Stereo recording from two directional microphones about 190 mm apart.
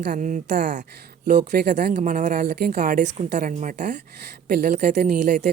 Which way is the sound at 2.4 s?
55° right (ahead or behind).